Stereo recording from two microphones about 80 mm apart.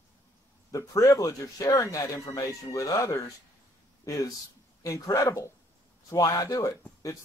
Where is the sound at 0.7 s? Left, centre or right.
Left.